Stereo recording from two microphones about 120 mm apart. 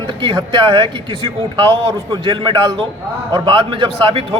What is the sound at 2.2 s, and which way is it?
A man's voice, 45° right (ahead or behind).